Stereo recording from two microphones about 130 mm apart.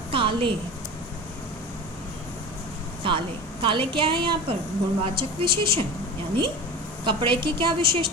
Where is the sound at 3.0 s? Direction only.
40° right (ahead or behind).